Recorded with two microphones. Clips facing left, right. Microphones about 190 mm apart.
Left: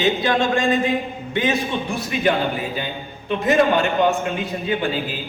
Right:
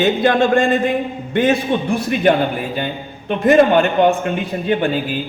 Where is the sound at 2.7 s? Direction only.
55° right (ahead or behind).